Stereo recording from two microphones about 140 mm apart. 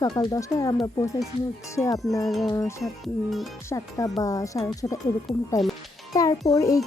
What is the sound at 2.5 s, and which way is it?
Speech, 25° left (ahead or behind).